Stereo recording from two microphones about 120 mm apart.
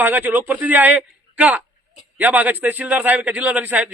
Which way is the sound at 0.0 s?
15° right (ahead or behind).